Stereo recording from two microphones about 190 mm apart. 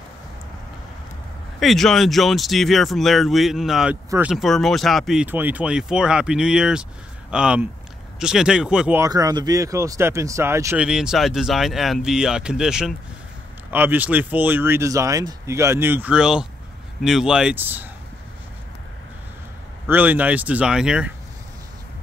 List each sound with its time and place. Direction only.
1.6 s speech: centre (ahead or behind)
9.0 s speech: 20° right (ahead or behind)
19.9 s speech: 10° right (ahead or behind)